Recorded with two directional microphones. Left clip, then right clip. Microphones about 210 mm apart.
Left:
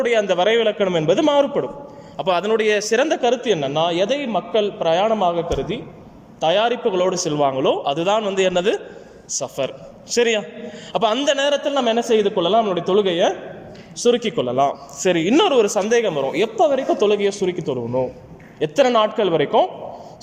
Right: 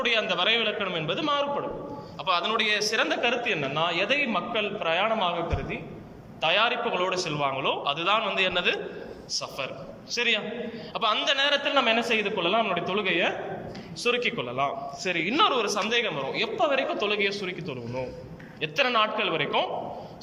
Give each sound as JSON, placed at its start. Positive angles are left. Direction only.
{"t": 0.0, "sound": "a man's voice", "side_deg": 40}